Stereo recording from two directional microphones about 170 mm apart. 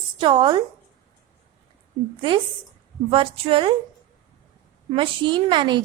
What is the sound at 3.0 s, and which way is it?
Speech, 30° right (ahead or behind).